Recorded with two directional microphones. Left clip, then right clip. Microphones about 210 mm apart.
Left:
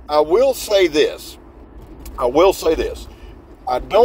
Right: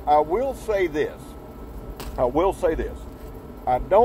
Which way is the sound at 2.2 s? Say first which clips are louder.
Left 7 dB; 15° right (ahead or behind).